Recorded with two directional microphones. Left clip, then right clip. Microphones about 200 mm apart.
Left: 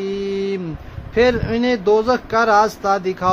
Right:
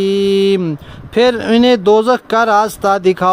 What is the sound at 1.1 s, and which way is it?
Speech, 50° right (ahead or behind).